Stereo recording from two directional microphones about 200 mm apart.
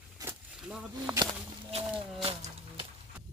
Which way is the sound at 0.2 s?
10° right (ahead or behind).